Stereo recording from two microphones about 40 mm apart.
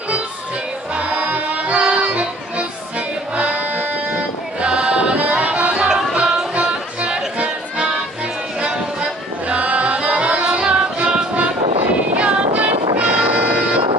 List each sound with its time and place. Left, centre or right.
0.9 s music: right
1.8 s music: right
4.6 s music: right
5.8 s music: right
9.5 s music: right
12.2 s music: right